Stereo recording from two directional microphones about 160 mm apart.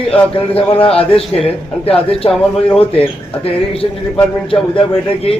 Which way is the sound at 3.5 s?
35° left (ahead or behind).